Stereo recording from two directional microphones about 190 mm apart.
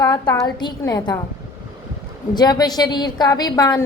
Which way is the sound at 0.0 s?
20° left (ahead or behind).